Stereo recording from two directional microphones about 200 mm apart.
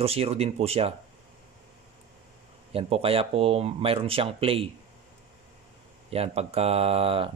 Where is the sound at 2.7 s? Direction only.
30° right (ahead or behind).